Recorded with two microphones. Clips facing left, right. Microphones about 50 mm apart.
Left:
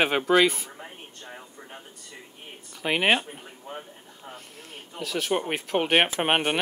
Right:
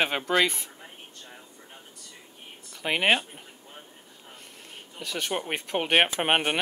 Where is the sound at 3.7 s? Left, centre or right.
Left.